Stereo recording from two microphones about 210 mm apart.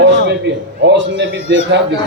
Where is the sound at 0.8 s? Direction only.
60° right (ahead or behind).